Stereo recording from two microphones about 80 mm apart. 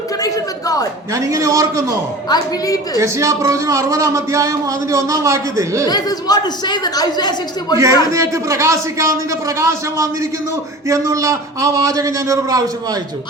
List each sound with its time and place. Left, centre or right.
0.2 s a sound: left
1.1 s a man's voice: right
2.3 s a woman's voice: left
3.0 s speech: right
5.9 s a woman's voice: left
8.1 s a man's voice: right